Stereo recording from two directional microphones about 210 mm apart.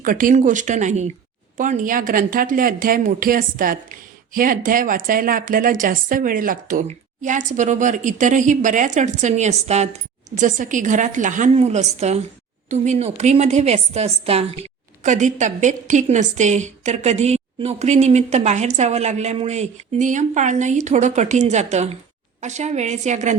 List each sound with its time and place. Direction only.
0.0 s a woman's voice: 40° right (ahead or behind)